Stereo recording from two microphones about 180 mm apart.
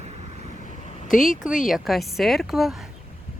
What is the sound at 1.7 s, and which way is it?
Speech, centre (ahead or behind).